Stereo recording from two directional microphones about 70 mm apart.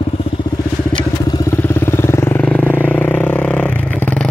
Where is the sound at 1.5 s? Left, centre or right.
Left.